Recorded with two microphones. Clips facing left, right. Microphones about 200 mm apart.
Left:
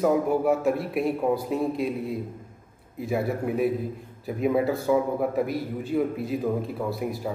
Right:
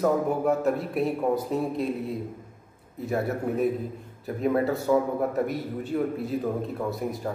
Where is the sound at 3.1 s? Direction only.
10° left (ahead or behind).